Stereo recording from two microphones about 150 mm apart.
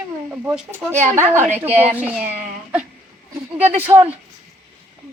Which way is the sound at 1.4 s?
50° right (ahead or behind).